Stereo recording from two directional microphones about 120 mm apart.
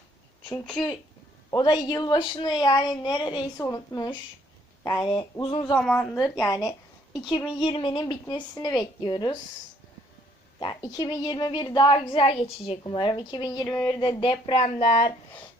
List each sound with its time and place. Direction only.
0.6 s speech: 10° left (ahead or behind)
1.5 s a woman's voice: 35° left (ahead or behind)
4.9 s speech: 45° left (ahead or behind)
5.8 s speech: 10° left (ahead or behind)
6.2 s speech: 30° left (ahead or behind)
7.6 s a woman's voice: 45° left (ahead or behind)
10.6 s a woman's voice: 35° left (ahead or behind)
12.9 s a woman's voice: 40° left (ahead or behind)
14.8 s speech: 70° left (ahead or behind)